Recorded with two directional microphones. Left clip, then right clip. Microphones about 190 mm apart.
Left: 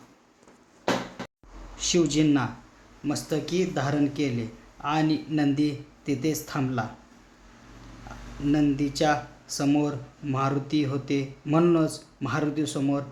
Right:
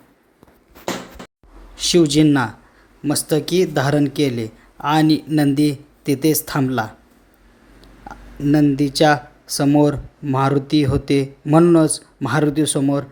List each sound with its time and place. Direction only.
1.7 s speech: 35° right (ahead or behind)
8.4 s speech: 35° right (ahead or behind)